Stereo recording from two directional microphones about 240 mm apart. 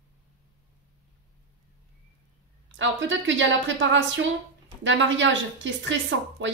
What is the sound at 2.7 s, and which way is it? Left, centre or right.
Speech, right.